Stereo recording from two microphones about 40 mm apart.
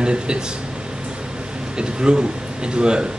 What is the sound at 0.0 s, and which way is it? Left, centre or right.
Speech, right.